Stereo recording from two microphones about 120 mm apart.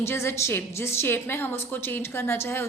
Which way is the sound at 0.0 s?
20° left (ahead or behind).